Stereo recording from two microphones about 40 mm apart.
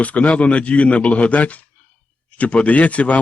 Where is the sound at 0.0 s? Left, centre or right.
Left.